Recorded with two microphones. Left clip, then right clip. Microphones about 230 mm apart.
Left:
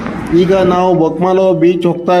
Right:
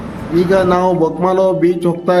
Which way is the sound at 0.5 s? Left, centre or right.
Centre.